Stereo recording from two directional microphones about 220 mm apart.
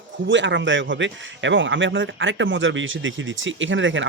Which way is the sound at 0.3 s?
55° right (ahead or behind).